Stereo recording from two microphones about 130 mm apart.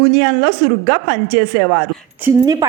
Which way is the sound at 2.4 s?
25° right (ahead or behind).